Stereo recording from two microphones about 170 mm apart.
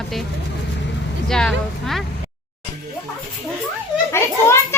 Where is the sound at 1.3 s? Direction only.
5° left (ahead or behind).